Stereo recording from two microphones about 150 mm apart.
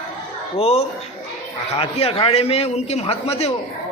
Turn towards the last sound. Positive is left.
turn(degrees=45)  # may be behind; listen again after turning